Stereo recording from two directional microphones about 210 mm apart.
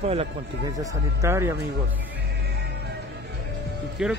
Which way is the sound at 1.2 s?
10° right (ahead or behind).